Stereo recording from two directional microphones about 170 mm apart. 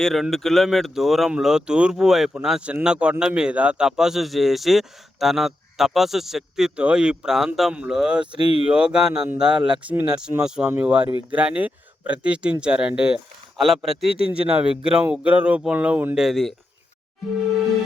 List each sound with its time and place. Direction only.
0.0 s speech: centre (ahead or behind)
8.4 s speech: 35° left (ahead or behind)
8.6 s speech: 5° right (ahead or behind)